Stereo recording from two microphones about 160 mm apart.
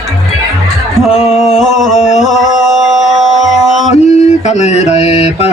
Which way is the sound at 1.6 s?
Centre (ahead or behind).